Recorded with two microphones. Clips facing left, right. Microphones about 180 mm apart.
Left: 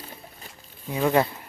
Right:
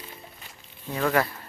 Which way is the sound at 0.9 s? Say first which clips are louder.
Left 3 dB; 20° left (ahead or behind).